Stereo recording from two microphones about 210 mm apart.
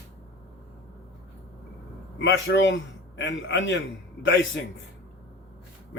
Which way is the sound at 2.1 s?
60° left (ahead or behind).